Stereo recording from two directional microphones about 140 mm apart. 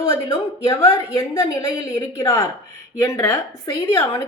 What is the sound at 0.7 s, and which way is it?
A woman's voice, 20° left (ahead or behind).